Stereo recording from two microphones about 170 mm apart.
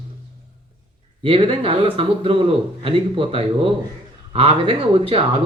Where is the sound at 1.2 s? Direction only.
35° right (ahead or behind).